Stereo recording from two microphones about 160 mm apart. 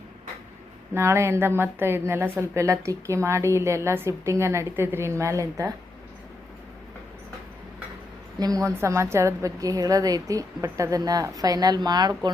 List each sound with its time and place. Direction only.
0.9 s a woman's voice: 15° right (ahead or behind)
8.4 s a woman's voice: 20° right (ahead or behind)